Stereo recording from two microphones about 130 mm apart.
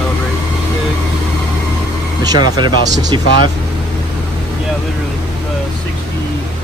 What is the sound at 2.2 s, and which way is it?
Speech, 35° right (ahead or behind).